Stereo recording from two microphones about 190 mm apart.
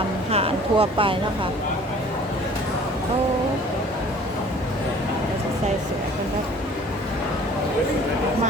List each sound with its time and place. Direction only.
0.3 s speech: 30° right (ahead or behind)